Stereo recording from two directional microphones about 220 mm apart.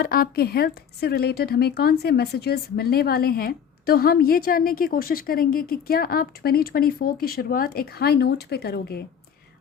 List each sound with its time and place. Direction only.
0.0 s speech: 40° left (ahead or behind)